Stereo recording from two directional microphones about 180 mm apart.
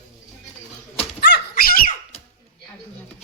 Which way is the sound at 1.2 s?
60° left (ahead or behind).